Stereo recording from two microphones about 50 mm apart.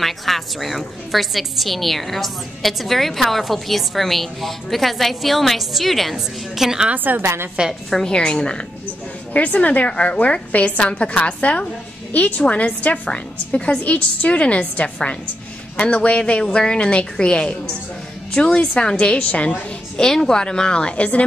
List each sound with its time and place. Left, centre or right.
0.0 s a woman's voice: centre
7.2 s a woman's voice: right
7.9 s a woman's voice: centre
9.3 s a woman's voice: left
20.0 s a woman's voice: centre